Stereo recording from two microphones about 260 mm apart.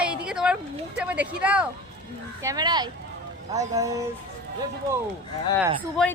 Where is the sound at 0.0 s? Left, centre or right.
Centre.